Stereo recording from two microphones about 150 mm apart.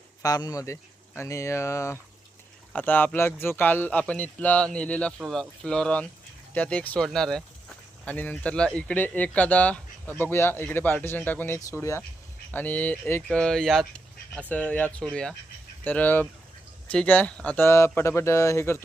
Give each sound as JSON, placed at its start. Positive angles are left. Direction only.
{"t": 0.2, "sound": "speech", "side_deg": 25}